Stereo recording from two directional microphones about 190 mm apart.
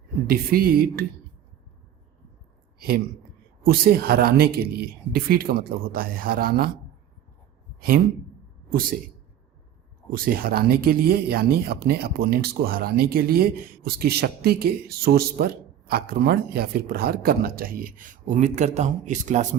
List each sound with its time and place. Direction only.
0.3 s speech: 50° right (ahead or behind)
2.7 s speech: 55° right (ahead or behind)
8.7 s a man's voice: 50° right (ahead or behind)
10.1 s speech: 50° right (ahead or behind)